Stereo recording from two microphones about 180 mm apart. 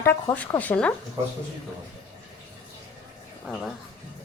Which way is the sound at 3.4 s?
Centre (ahead or behind).